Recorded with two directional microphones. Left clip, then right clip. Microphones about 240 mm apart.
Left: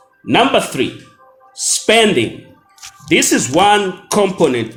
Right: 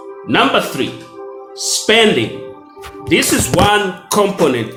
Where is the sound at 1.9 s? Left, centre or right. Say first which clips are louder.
Even; left.